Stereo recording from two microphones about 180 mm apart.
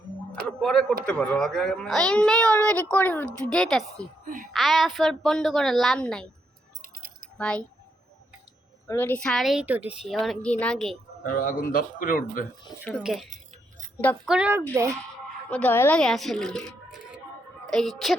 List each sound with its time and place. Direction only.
0.4 s speech: centre (ahead or behind)
7.3 s speech: 5° left (ahead or behind)
8.9 s speech: 10° left (ahead or behind)
11.4 s a man's voice: 50° left (ahead or behind)
12.8 s speech: centre (ahead or behind)
13.3 s keys jangling: 45° right (ahead or behind)
14.3 s a woman's voice: 5° right (ahead or behind)
15.4 s speech: 10° left (ahead or behind)